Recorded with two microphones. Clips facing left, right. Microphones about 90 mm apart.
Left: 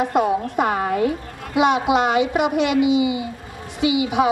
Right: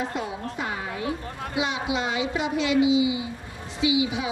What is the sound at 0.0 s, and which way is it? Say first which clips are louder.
A woman's voice: left 11 dB; 60° left (ahead or behind).